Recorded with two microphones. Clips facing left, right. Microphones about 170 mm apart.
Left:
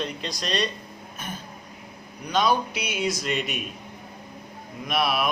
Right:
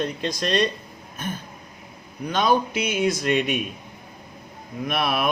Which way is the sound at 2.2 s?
50° right (ahead or behind).